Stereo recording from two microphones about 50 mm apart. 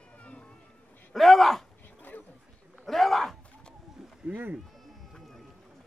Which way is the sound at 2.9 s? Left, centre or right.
Centre.